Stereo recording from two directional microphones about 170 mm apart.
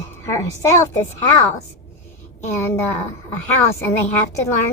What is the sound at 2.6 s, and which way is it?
Speech, 15° left (ahead or behind).